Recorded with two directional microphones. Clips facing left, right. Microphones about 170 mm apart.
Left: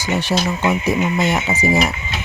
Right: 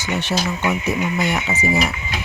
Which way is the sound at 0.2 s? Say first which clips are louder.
Left 2 dB; 35° left (ahead or behind).